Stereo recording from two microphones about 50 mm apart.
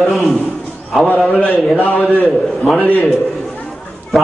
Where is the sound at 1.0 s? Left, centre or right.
Left.